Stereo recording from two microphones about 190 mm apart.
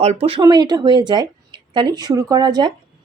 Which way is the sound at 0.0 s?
35° right (ahead or behind).